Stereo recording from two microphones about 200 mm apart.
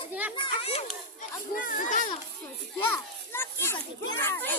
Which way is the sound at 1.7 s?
40° left (ahead or behind).